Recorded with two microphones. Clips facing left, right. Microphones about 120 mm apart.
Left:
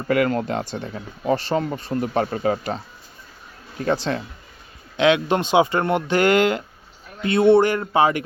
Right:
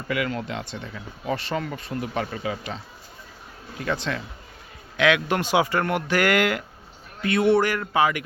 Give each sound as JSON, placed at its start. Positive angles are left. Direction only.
{"t": 0.1, "sound": "speech", "side_deg": 45}